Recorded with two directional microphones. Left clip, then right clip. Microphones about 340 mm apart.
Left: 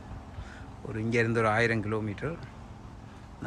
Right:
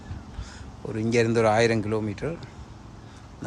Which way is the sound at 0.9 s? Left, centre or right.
Centre.